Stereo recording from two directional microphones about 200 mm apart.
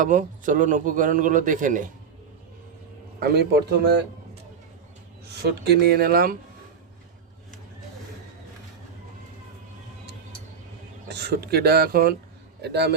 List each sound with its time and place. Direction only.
0.0 s speech: 40° right (ahead or behind)
3.2 s speech: 55° right (ahead or behind)
5.5 s speech: 55° right (ahead or behind)
11.1 s a man's voice: 55° right (ahead or behind)